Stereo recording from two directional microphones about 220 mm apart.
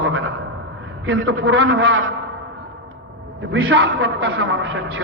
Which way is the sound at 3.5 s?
60° right (ahead or behind).